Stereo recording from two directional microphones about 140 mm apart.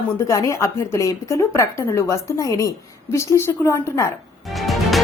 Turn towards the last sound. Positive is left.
turn(degrees=0)  # may be behind; listen again after turning